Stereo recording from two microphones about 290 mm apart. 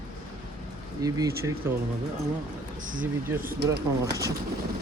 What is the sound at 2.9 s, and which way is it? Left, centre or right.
Speech, right.